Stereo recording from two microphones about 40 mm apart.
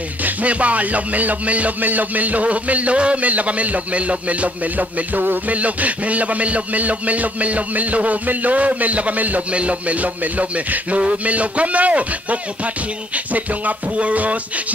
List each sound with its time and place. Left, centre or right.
0.2 s a man's voice: right
5.6 s a man's voice: right